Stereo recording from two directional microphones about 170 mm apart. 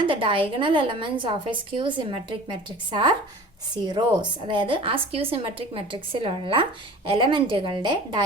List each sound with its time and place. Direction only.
0.0 s a woman's voice: 30° right (ahead or behind)